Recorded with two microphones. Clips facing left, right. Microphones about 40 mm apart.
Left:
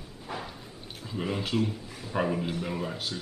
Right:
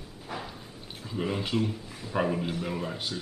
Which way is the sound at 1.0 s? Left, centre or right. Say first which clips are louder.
Right 1 dB; centre.